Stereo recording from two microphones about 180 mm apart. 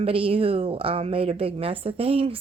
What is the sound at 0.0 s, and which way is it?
A woman's voice, 30° right (ahead or behind).